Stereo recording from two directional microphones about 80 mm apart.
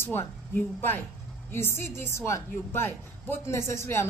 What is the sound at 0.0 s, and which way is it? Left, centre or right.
A woman's voice, left.